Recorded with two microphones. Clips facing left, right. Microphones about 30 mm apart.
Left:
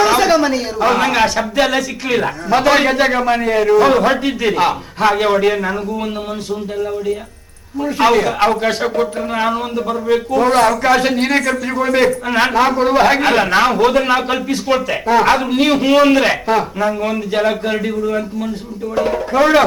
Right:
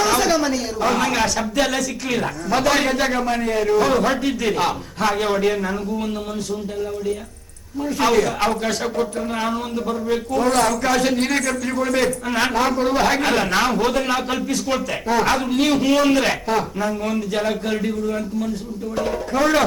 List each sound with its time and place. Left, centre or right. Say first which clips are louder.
0.0 s a man's voice: left 6 dB; left
7.8 s a man's voice: left 5 dB; left